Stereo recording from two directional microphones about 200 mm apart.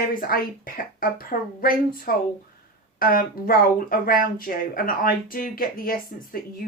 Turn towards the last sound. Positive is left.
turn(degrees=45)  # may be behind; listen again after turning